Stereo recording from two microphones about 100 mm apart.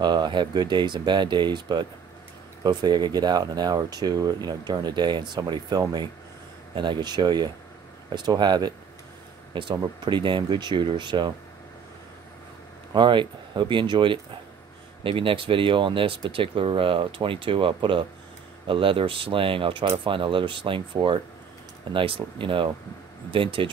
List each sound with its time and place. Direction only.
0.0 s speech: 45° right (ahead or behind)
6.7 s speech: 50° right (ahead or behind)
12.9 s speech: 50° right (ahead or behind)